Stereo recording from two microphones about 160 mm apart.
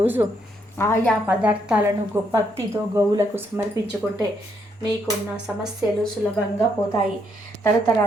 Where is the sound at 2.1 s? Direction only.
20° right (ahead or behind).